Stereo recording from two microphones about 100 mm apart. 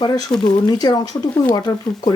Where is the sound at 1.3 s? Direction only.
15° left (ahead or behind).